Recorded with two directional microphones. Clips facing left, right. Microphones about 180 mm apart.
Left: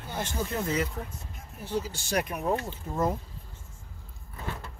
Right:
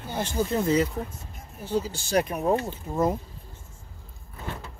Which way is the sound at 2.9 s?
15° right (ahead or behind).